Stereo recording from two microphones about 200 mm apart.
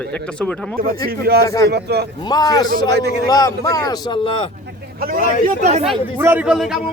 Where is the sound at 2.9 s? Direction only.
55° right (ahead or behind).